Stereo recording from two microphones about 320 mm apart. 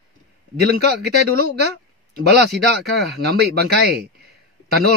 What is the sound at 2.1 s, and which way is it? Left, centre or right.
Speech, right.